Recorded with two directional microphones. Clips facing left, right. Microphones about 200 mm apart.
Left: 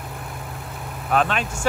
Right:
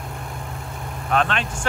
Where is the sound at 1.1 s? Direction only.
5° left (ahead or behind).